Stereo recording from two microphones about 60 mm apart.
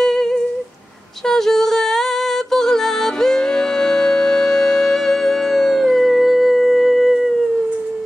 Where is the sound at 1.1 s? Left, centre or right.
Centre.